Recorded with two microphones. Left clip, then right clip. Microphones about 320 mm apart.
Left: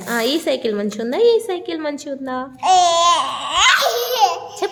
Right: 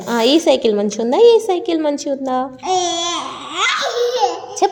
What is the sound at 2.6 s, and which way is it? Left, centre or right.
Babbling, left.